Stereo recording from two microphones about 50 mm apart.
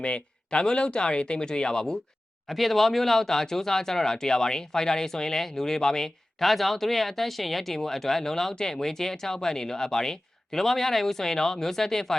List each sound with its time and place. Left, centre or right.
0.0 s speech: left
2.5 s speech: centre